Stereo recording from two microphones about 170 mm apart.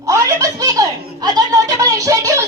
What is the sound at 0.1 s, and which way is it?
Chuckle, 20° right (ahead or behind).